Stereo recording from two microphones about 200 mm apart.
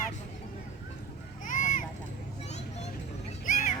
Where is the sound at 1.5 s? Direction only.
40° left (ahead or behind).